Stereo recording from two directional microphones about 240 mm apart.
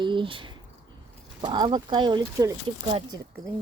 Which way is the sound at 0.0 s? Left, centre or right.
Centre.